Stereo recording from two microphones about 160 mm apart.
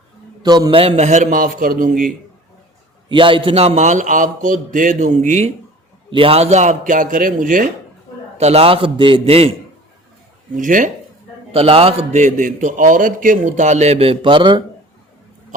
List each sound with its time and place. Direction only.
0.4 s a man's voice: 25° right (ahead or behind); by 2.0 s 60° right (ahead or behind)
3.1 s a man's voice: 30° right (ahead or behind)
6.1 s a man's voice: 35° right (ahead or behind); by 7.7 s 60° right (ahead or behind)
8.4 s a man's voice: 40° right (ahead or behind)
10.5 s speech: 55° right (ahead or behind)
11.5 s a man's voice: 35° right (ahead or behind)